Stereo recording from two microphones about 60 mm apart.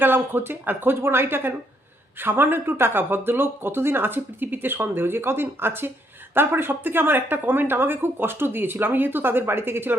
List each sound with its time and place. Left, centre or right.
0.0 s speech: right